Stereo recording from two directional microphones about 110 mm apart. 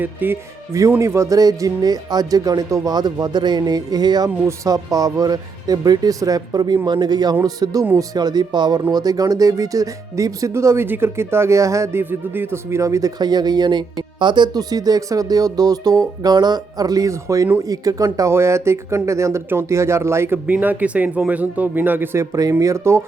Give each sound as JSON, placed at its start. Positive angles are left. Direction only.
{"t": 0.0, "sound": "speech", "side_deg": -15}
{"t": 0.7, "sound": "speech", "side_deg": -25}